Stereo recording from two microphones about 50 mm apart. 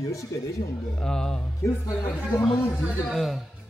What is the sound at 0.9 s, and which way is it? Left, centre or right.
Music, centre.